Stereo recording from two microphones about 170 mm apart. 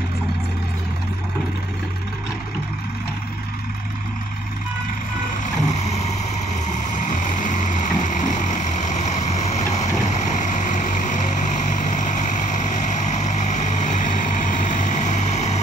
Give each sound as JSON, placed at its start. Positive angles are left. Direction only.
{"t": 5.6, "sound": "vehicle", "side_deg": 40}